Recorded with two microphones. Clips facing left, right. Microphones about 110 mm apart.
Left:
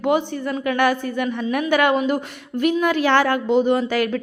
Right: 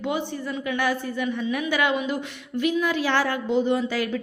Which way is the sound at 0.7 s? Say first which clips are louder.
Left 6 dB; 60° left (ahead or behind).